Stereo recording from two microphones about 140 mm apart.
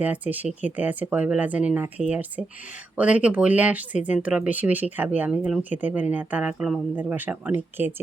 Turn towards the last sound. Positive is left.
turn(degrees=-15)  # may be behind; listen again after turning